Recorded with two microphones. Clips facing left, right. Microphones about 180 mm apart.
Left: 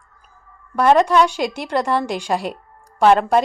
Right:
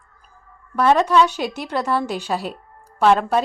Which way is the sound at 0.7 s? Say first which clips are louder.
Left 2 dB; 10° left (ahead or behind).